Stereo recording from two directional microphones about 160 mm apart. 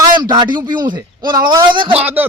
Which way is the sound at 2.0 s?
10° right (ahead or behind).